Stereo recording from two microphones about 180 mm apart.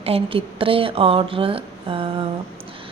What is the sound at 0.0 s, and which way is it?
A woman's voice, 30° right (ahead or behind).